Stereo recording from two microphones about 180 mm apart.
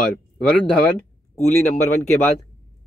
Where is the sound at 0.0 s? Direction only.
5° left (ahead or behind).